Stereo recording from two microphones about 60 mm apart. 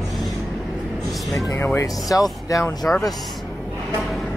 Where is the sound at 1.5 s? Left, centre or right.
Left.